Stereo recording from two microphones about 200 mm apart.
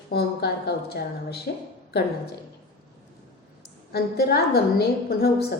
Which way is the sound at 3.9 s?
55° left (ahead or behind).